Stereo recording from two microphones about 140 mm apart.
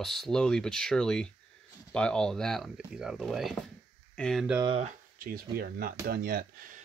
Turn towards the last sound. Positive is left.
turn(degrees=-85)